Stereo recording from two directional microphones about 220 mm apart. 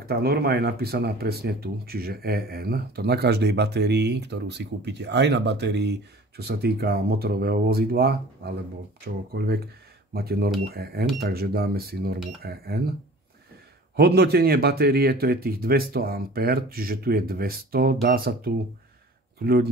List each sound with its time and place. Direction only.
0.0 s speech: 45° right (ahead or behind)
13.9 s speech: 45° right (ahead or behind)